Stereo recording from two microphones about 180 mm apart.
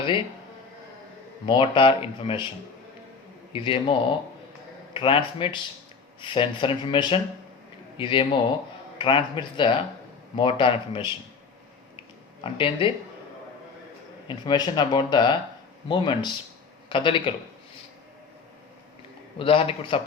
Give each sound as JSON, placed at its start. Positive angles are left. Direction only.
{"t": 1.5, "sound": "speech", "side_deg": 30}
{"t": 3.5, "sound": "speech", "side_deg": 30}
{"t": 4.9, "sound": "speech", "side_deg": 30}
{"t": 12.4, "sound": "speech", "side_deg": 30}
{"t": 14.3, "sound": "speech", "side_deg": 25}
{"t": 19.4, "sound": "a man's voice", "side_deg": 30}